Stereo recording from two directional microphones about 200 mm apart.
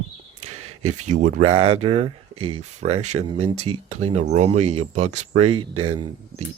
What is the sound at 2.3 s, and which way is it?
Speech, 90° right.